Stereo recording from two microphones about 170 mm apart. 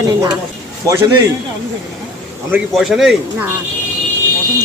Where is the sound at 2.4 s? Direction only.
5° right (ahead or behind).